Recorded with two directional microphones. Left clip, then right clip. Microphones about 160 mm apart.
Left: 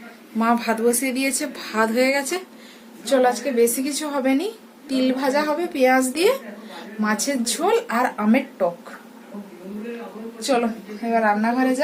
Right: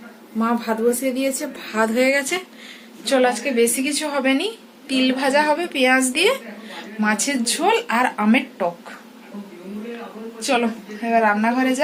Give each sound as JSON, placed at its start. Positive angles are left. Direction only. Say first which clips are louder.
{"t": 0.3, "sound": "a woman's voice", "louder": "left 1 dB", "side_deg": 10}
{"t": 11.0, "sound": "a woman's voice", "louder": "right 2 dB", "side_deg": -20}